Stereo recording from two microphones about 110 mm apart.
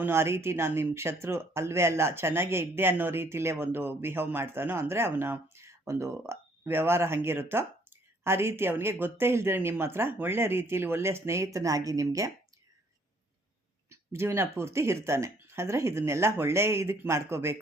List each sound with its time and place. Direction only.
0.0 s speech: 20° right (ahead or behind)
13.9 s speech: 25° right (ahead or behind)